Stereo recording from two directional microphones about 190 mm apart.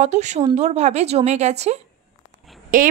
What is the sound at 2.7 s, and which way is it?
Speech, 45° right (ahead or behind).